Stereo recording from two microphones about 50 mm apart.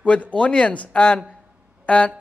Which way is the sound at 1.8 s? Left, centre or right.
Left.